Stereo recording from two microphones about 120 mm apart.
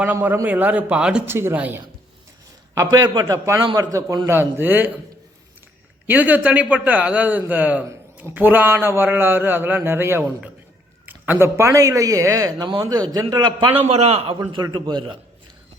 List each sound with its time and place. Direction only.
0.0 s a man's voice: 15° right (ahead or behind)
1.3 s speech: 20° right (ahead or behind)
2.7 s a man's voice: 30° right (ahead or behind)
4.3 s a man's voice: 20° right (ahead or behind)
6.1 s a man's voice: 15° right (ahead or behind); by 13.8 s 40° right (ahead or behind)
13.8 s a man's voice: 65° right (ahead or behind)
14.5 s a man's voice: 40° right (ahead or behind)